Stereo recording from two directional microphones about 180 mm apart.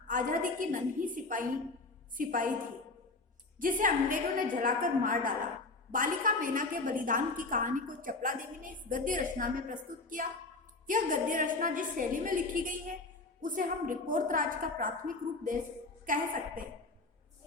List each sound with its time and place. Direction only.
0.1 s a woman's voice: 50° right (ahead or behind)
3.6 s a woman's voice: 50° right (ahead or behind)